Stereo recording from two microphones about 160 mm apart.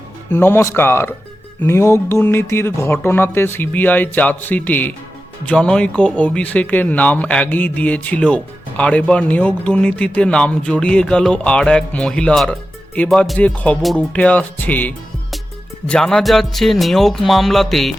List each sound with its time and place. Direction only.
0.3 s speech: 15° left (ahead or behind)